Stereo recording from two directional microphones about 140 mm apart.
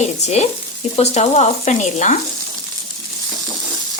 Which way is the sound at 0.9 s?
50° left (ahead or behind).